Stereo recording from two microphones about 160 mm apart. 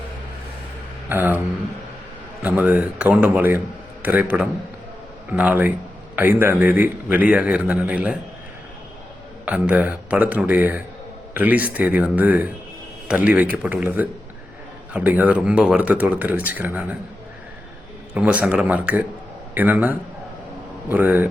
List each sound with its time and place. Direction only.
1.1 s a man's voice: 10° right (ahead or behind)
2.4 s a man's voice: 10° right (ahead or behind)
9.5 s a man's voice: 10° right (ahead or behind)
18.1 s a man's voice: 5° right (ahead or behind)